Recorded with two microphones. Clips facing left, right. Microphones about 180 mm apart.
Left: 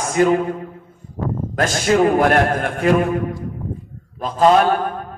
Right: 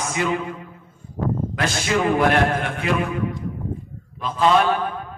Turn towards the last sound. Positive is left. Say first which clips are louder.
# left 4 dB
turn(degrees=45)  # may be behind; listen again after turning